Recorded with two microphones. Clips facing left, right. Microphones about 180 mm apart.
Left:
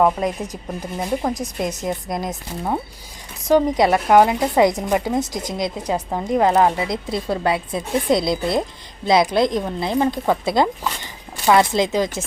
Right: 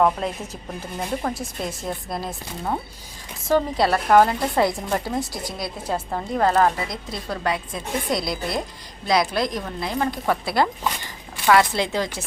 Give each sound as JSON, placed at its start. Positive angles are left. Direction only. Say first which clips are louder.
{"t": 0.0, "sound": "speech", "louder": "left 3 dB", "side_deg": 15}